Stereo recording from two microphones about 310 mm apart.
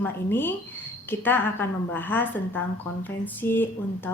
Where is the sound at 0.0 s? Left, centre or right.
Centre.